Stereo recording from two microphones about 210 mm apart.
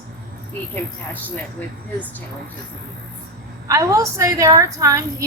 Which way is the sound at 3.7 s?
15° right (ahead or behind).